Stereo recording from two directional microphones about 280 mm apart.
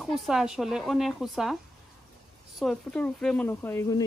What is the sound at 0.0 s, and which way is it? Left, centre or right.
Speech, centre.